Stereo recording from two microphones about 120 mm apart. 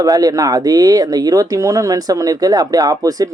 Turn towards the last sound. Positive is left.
turn(degrees=-30)  # may be behind; listen again after turning